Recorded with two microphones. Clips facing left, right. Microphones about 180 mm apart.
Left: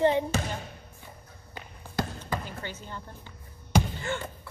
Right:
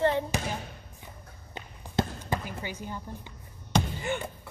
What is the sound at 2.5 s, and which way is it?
Speech, 10° right (ahead or behind).